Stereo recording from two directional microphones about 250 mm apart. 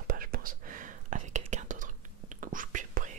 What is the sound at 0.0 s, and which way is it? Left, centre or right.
Whispering, right.